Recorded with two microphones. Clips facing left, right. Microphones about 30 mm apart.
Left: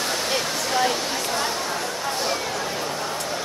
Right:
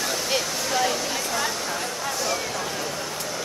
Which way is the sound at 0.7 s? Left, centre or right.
Left.